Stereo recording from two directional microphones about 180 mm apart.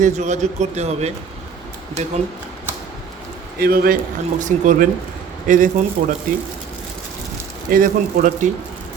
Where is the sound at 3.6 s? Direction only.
55° right (ahead or behind).